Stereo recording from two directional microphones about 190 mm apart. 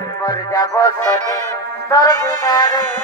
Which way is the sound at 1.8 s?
20° left (ahead or behind).